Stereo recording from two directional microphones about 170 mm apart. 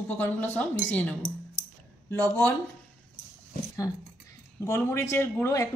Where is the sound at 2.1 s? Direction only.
10° left (ahead or behind).